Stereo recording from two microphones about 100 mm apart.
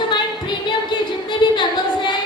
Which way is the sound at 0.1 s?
50° left (ahead or behind).